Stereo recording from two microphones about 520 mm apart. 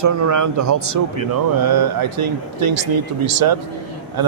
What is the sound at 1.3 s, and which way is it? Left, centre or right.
Speech, right.